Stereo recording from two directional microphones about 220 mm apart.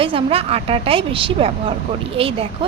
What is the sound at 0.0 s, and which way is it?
Speech, 25° right (ahead or behind).